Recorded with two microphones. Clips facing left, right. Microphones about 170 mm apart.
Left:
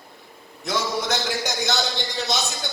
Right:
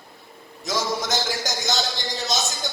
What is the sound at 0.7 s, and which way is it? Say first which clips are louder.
A man's voice: left 1 dB; 60° left (ahead or behind).